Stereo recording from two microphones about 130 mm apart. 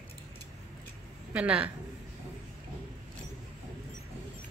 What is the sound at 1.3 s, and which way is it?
Speech, 10° right (ahead or behind).